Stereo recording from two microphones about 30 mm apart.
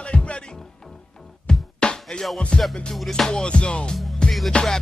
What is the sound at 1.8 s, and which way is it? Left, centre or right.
Music, left.